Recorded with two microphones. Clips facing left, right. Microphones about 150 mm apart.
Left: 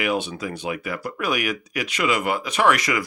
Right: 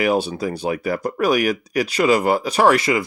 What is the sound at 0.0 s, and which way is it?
Speech, 35° right (ahead or behind).